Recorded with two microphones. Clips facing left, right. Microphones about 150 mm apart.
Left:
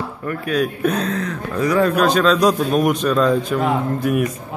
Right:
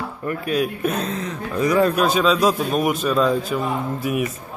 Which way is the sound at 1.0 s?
25° right (ahead or behind).